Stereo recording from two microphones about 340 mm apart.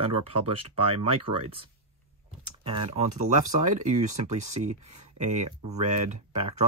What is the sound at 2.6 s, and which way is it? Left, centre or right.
Speech, centre.